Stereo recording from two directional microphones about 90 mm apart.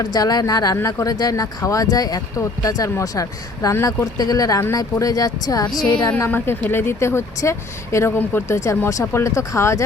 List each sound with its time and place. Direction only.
0.0 s speech: 45° left (ahead or behind)
6.1 s speech: 20° left (ahead or behind)
8.4 s speech: 30° left (ahead or behind)